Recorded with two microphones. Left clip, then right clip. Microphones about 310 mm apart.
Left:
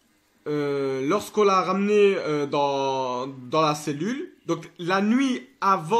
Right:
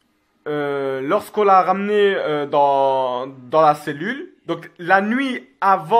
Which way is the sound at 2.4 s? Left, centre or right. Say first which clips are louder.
Right 9 dB; right.